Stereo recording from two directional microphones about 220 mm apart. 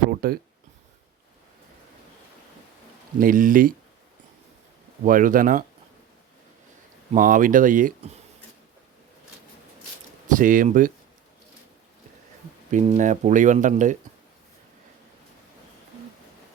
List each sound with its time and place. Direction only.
0.1 s a sound: 40° right (ahead or behind)
3.2 s speech: 40° right (ahead or behind)
5.0 s speech: 40° right (ahead or behind)
7.1 s speech: 40° right (ahead or behind)
10.2 s speech: 35° right (ahead or behind)
12.7 s speech: 30° right (ahead or behind)